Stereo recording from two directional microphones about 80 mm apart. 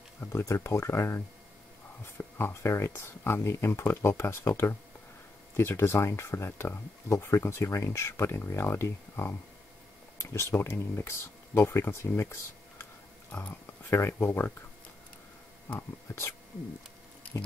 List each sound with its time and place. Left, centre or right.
0.2 s speech: left
16.1 s speech: left